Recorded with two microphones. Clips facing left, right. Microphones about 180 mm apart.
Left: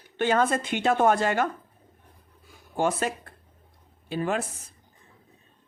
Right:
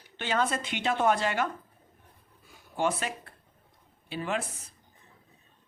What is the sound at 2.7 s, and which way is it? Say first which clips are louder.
Speech: left 4 dB; 45° left (ahead or behind).